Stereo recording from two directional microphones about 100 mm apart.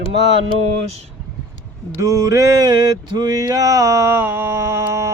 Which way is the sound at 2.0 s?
35° right (ahead or behind).